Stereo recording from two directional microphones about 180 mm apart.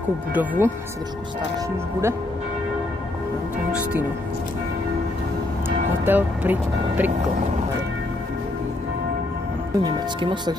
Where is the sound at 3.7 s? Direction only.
10° right (ahead or behind).